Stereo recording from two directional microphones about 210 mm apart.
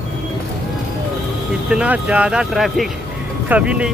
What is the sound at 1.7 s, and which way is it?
Speech, 5° right (ahead or behind).